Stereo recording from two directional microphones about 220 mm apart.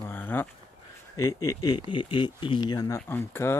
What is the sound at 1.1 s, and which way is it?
Speech, 15° left (ahead or behind).